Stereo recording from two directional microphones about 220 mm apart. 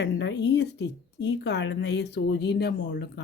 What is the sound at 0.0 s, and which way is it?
Speech, 55° left (ahead or behind).